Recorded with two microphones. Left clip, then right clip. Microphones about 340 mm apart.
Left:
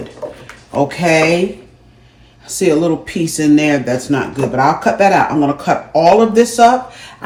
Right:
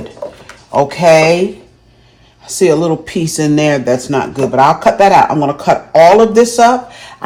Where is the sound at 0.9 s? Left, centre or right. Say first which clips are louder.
Right 7 dB; centre.